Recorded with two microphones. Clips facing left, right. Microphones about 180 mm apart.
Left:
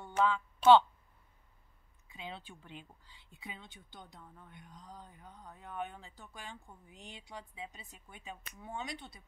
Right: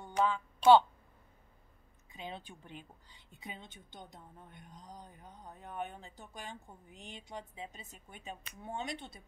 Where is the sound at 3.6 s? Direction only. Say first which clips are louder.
Right 2 dB; 20° right (ahead or behind).